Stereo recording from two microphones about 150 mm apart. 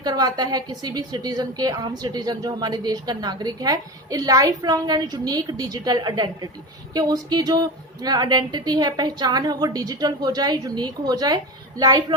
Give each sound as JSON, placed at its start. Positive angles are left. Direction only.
{"t": 0.0, "sound": "a woman's voice", "side_deg": -25}